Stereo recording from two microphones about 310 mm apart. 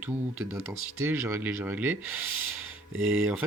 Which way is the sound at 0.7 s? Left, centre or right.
Centre.